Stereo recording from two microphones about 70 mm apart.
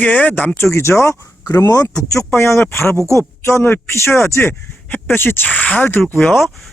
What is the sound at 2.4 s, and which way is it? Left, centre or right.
Speech, left.